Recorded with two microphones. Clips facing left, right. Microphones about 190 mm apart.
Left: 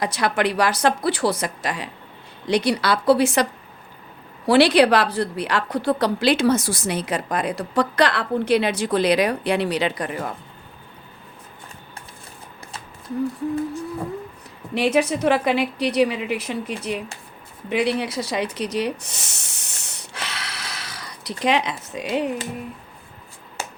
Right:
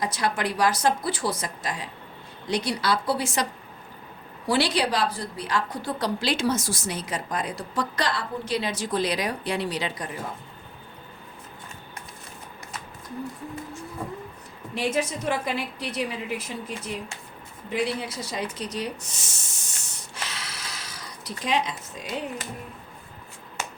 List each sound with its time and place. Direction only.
0.0 s a woman's voice: 70° left (ahead or behind)
4.4 s a woman's voice: 70° left (ahead or behind)
14.8 s a woman's voice: 70° left (ahead or behind)
17.7 s snort: 70° left (ahead or behind)